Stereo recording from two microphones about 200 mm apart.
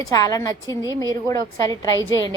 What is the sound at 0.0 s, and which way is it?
A woman's voice, 20° left (ahead or behind).